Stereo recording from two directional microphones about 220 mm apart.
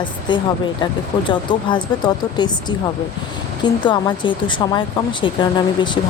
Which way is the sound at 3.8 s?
20° left (ahead or behind).